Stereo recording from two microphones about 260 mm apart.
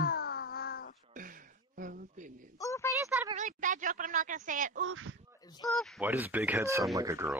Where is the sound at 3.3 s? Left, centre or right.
Right.